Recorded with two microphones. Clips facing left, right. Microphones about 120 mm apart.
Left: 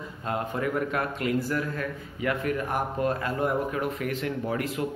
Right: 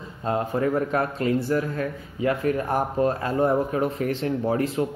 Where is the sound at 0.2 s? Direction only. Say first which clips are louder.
Right 5 dB; 30° right (ahead or behind).